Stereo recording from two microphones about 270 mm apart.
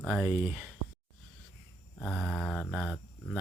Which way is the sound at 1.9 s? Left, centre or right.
Centre.